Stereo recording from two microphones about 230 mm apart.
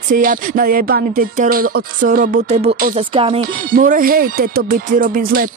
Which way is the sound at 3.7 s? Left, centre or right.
Right.